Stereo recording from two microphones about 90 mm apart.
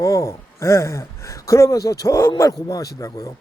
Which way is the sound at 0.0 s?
35° left (ahead or behind).